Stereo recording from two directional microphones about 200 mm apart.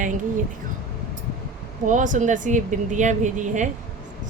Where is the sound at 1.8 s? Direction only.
40° right (ahead or behind).